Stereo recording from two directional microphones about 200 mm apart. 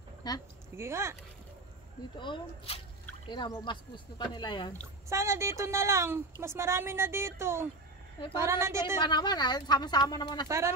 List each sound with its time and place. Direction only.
0.2 s speech: 20° left (ahead or behind)
0.7 s a woman's voice: 15° right (ahead or behind)
2.1 s speech: 25° left (ahead or behind)
5.1 s a woman's voice: 15° right (ahead or behind)
9.0 s speech: 20° left (ahead or behind)